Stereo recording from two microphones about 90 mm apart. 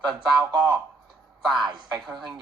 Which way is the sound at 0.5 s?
55° right (ahead or behind).